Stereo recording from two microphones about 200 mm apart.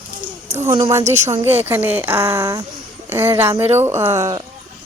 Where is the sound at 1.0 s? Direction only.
35° right (ahead or behind).